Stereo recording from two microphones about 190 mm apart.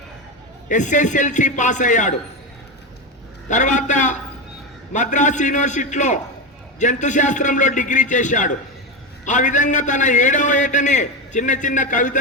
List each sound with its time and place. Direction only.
0.7 s a man's voice: 40° left (ahead or behind)
3.5 s a man's voice: 40° left (ahead or behind)